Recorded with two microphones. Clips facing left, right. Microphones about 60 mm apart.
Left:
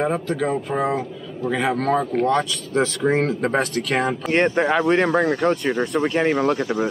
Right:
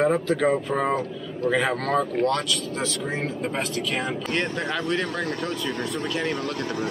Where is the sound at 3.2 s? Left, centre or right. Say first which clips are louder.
Left 7 dB; left.